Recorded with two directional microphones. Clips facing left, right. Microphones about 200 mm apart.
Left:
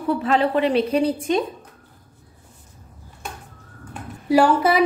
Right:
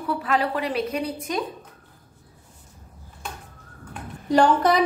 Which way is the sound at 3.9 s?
5° left (ahead or behind).